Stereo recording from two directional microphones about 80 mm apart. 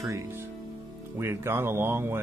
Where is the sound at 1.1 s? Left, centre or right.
Right.